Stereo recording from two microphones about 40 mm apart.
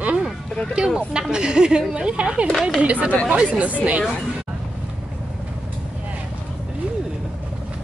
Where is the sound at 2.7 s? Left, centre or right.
Right.